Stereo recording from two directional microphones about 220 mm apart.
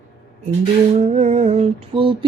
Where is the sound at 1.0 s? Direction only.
30° right (ahead or behind).